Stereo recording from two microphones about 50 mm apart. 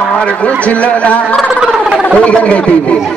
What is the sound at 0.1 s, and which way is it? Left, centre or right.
Speech, left.